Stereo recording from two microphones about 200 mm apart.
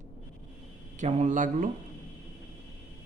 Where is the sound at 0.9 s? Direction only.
35° right (ahead or behind).